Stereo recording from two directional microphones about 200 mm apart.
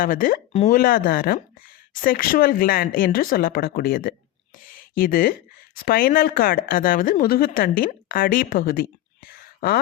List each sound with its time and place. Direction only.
0.0 s a woman's voice: 45° left (ahead or behind)
4.5 s a sound: 45° left (ahead or behind)
5.7 s a woman's voice: 45° left (ahead or behind)